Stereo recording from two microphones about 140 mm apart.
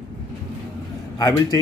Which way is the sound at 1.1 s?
25° left (ahead or behind).